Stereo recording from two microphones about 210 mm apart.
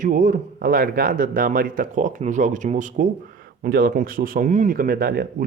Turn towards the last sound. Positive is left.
turn(degrees=-45)  # may be behind; listen again after turning